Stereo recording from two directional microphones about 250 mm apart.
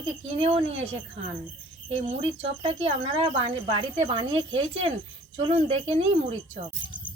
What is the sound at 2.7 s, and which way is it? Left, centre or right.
A woman's voice, right.